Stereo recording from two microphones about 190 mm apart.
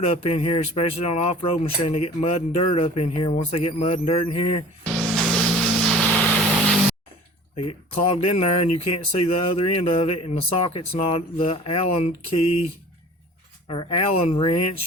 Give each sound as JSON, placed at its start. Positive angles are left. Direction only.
{"t": 0.1, "sound": "speech", "side_deg": 30}
{"t": 4.9, "sound": "music", "side_deg": 0}
{"t": 7.5, "sound": "speech", "side_deg": 30}
{"t": 13.7, "sound": "speech", "side_deg": 30}